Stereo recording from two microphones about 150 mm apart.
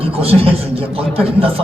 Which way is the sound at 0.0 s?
40° right (ahead or behind).